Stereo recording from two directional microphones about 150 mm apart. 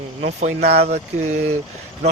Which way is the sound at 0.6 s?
90° right.